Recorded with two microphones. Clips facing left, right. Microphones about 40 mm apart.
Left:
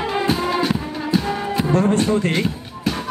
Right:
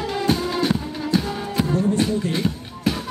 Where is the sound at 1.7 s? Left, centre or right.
Left.